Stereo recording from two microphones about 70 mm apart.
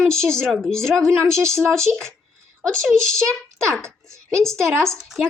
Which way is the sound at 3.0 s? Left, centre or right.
Centre.